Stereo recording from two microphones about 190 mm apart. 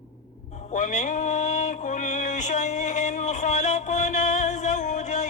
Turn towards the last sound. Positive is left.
turn(degrees=40)  # may be behind; listen again after turning